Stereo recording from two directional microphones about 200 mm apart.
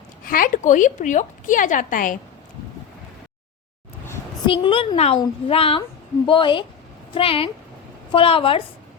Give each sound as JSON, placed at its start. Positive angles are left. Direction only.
{"t": 0.3, "sound": "a woman's voice", "side_deg": 45}
{"t": 4.4, "sound": "a woman's voice", "side_deg": 25}